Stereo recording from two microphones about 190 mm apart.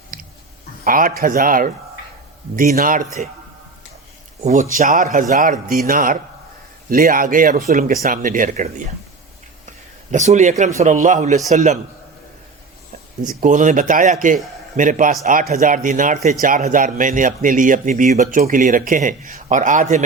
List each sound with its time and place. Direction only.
0.9 s speech: 45° right (ahead or behind)
4.4 s speech: 45° right (ahead or behind)
10.1 s a man's voice: 40° right (ahead or behind)
13.2 s speech: 45° right (ahead or behind)